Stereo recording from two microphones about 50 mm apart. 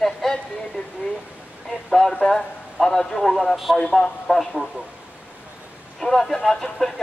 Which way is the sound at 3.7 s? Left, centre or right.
Centre.